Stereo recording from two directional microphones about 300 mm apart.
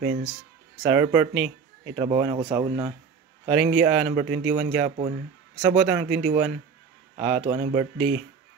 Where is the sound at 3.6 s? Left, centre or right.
Right.